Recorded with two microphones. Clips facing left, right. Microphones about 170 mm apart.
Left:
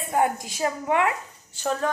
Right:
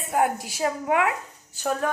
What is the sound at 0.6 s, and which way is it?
A woman's voice, 5° right (ahead or behind).